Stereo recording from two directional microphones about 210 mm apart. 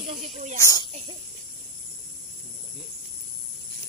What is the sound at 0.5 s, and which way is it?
Speech, 15° left (ahead or behind).